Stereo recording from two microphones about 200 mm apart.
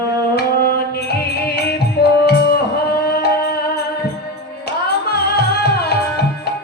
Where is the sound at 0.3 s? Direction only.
50° left (ahead or behind).